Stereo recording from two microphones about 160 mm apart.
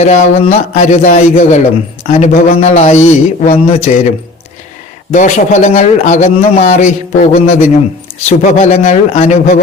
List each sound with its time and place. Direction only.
0.0 s a man's voice: 45° left (ahead or behind)
5.1 s a man's voice: 50° left (ahead or behind)